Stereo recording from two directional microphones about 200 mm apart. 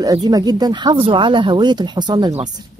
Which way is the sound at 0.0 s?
20° right (ahead or behind).